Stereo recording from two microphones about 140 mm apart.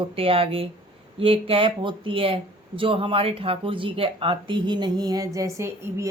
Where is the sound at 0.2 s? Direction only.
40° right (ahead or behind).